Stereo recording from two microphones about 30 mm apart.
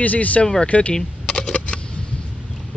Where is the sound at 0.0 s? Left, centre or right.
Left.